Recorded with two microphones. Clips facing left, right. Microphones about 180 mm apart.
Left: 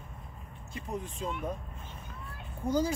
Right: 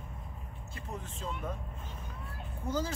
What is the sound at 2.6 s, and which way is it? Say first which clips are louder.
Speech: left 5 dB; 15° left (ahead or behind).